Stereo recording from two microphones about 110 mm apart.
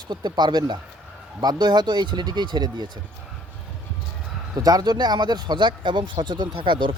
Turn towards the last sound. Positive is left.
turn(degrees=-50)  # may be behind; listen again after turning